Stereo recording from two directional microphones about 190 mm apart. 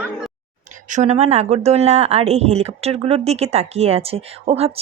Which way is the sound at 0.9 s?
35° right (ahead or behind).